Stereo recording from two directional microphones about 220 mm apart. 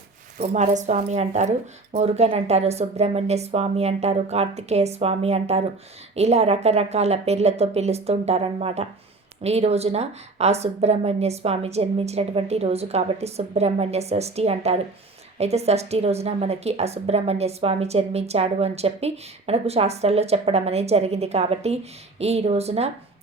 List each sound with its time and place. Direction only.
0.4 s a woman's voice: 30° right (ahead or behind)